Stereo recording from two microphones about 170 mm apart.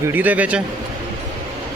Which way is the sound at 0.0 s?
10° right (ahead or behind).